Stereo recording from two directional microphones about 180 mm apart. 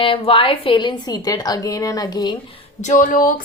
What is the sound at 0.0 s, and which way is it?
A woman's voice, 30° left (ahead or behind).